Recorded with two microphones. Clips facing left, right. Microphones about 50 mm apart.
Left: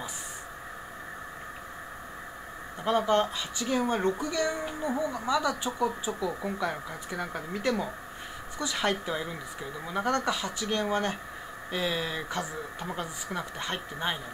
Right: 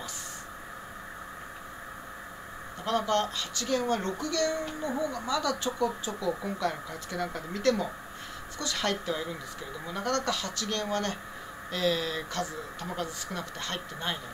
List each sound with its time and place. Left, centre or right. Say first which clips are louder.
2.8 s speech: left 3 dB; centre